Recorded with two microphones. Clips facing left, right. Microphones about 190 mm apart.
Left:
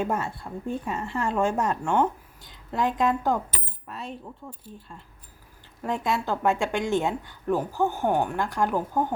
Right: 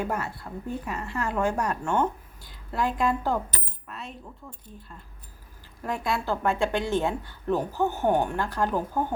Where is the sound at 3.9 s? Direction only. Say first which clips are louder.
Left 4 dB; 35° left (ahead or behind).